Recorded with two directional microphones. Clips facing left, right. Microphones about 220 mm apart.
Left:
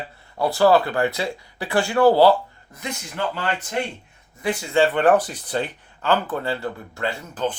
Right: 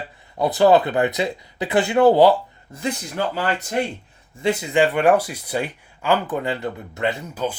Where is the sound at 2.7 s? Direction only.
30° right (ahead or behind).